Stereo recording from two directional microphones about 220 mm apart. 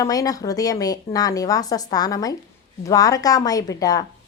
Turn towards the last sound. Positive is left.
turn(degrees=15)  # may be behind; listen again after turning